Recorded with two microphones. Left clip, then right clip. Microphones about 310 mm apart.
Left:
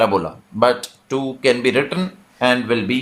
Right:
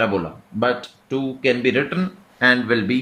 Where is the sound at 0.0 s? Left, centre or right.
Centre.